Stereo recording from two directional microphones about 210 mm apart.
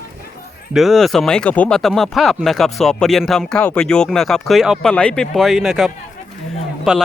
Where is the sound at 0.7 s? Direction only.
Centre (ahead or behind).